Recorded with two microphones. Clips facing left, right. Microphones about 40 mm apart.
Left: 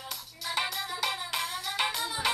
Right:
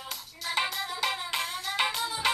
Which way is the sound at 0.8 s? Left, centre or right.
Centre.